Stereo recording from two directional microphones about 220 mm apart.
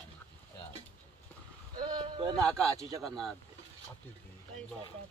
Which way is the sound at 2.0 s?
20° right (ahead or behind).